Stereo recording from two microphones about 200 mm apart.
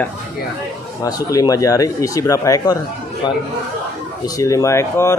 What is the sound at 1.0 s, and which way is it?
Speech, 20° left (ahead or behind).